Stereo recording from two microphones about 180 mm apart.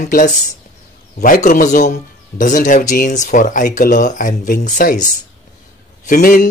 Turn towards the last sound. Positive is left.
turn(degrees=50)  # may be behind; listen again after turning